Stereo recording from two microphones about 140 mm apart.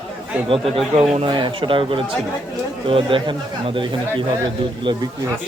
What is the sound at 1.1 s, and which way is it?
Speech, 40° right (ahead or behind).